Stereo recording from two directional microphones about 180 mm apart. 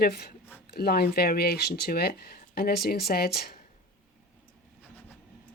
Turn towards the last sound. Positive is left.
turn(degrees=60)  # may be behind; listen again after turning